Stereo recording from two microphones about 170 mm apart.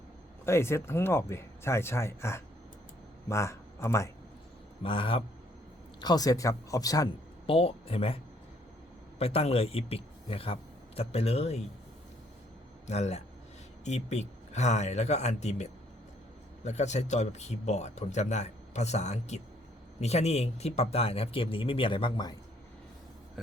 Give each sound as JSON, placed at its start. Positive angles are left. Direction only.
{"t": 0.4, "sound": "a man's voice", "side_deg": 15}
{"t": 4.8, "sound": "speech", "side_deg": 30}
{"t": 7.4, "sound": "speech", "side_deg": 35}
{"t": 12.9, "sound": "speech", "side_deg": 40}